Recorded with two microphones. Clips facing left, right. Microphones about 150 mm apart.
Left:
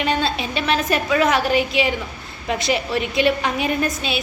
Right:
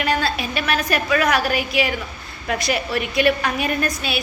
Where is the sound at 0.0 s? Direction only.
20° left (ahead or behind).